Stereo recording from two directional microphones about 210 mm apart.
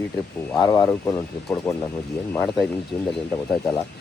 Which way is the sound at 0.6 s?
20° left (ahead or behind).